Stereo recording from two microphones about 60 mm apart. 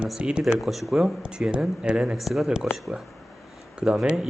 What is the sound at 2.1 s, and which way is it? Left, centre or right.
Speech, centre.